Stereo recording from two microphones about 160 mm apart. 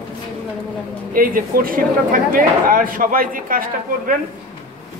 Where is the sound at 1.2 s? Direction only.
60° right (ahead or behind).